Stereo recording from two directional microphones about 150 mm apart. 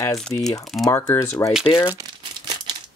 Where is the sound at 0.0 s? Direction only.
20° left (ahead or behind).